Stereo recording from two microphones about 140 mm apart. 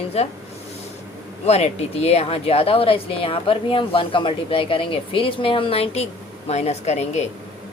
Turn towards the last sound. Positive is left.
turn(degrees=50)  # may be behind; listen again after turning